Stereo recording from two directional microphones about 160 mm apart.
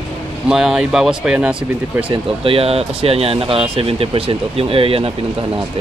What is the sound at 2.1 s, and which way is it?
Speech, 35° right (ahead or behind).